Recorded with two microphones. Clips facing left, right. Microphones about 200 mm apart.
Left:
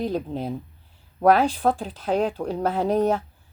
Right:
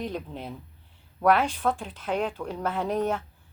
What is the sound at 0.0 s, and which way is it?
A woman's voice, 35° left (ahead or behind).